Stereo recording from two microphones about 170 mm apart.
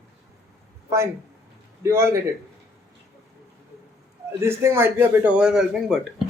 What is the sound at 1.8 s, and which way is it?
Speech, 15° right (ahead or behind).